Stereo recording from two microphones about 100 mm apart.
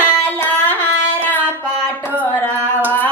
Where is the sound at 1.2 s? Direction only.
20° left (ahead or behind).